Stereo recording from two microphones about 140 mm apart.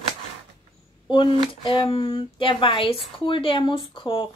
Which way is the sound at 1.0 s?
35° left (ahead or behind).